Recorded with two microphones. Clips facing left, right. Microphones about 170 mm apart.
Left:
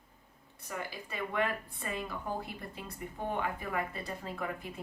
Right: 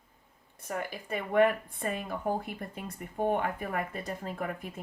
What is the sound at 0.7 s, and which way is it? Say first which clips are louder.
Speech: right 6 dB; 55° right (ahead or behind).